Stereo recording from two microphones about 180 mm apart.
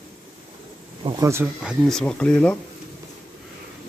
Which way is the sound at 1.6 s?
Centre (ahead or behind).